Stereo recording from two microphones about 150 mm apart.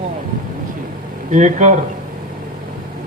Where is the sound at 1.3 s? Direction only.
55° right (ahead or behind).